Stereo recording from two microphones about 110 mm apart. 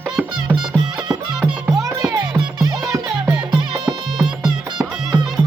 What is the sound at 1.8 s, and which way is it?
Music, 35° right (ahead or behind).